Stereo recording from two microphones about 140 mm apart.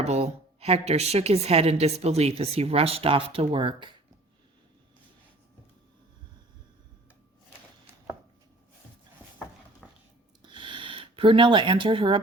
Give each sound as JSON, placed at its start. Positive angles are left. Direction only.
{"t": 0.0, "sound": "a woman's voice", "side_deg": -50}
{"t": 9.8, "sound": "biting", "side_deg": 0}
{"t": 10.4, "sound": "a sound", "side_deg": -35}